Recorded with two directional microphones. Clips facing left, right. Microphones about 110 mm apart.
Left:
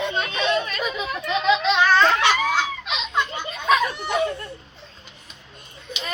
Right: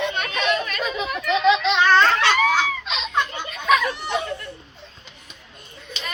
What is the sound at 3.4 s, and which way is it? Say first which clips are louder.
Children playing: right 1 dB; 30° left (ahead or behind).